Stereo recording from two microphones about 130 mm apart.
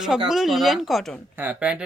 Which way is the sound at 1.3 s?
10° right (ahead or behind).